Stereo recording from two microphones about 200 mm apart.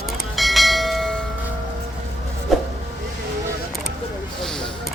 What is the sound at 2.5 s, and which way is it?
Vehicle, centre (ahead or behind).